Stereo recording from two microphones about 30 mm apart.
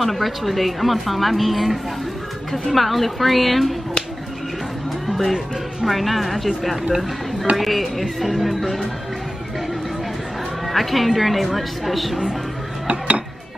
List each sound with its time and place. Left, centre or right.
0.0 s a woman's voice: centre
5.0 s music: centre
5.9 s a woman's voice: centre
10.7 s a woman's voice: centre